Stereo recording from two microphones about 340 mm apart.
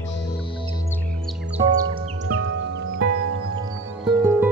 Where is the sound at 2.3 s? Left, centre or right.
Right.